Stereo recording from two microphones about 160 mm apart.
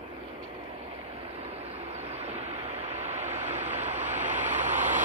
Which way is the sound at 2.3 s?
40° right (ahead or behind).